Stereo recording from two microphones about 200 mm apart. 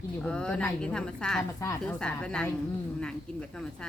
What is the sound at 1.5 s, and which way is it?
Speech, 15° left (ahead or behind).